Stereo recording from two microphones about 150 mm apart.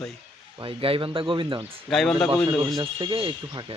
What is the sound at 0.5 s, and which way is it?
Speech, 35° right (ahead or behind).